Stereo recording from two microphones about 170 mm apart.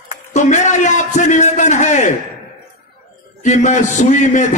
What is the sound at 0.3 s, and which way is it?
A man's voice, 45° left (ahead or behind).